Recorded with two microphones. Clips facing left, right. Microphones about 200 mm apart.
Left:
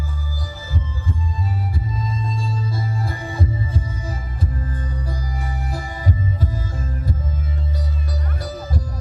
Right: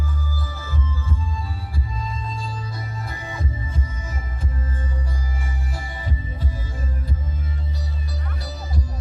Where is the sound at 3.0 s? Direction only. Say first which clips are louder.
Left 6 dB; 30° left (ahead or behind).